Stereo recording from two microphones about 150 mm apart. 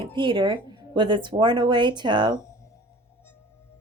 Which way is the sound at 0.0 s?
35° right (ahead or behind).